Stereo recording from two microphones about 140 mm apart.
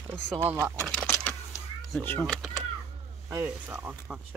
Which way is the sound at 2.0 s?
10° left (ahead or behind).